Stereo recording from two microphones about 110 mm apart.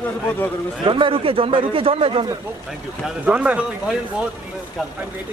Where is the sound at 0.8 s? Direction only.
50° right (ahead or behind).